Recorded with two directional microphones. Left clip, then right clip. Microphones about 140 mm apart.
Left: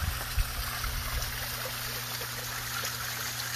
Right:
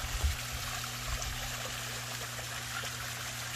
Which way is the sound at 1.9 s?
55° left (ahead or behind).